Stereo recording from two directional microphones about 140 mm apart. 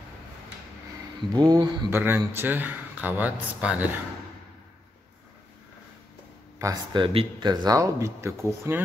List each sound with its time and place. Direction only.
1.3 s speech: 30° right (ahead or behind)
1.9 s speech: 15° right (ahead or behind)
6.6 s speech: 30° right (ahead or behind)